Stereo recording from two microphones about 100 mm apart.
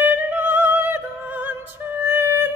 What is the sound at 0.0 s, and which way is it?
Music, 20° right (ahead or behind).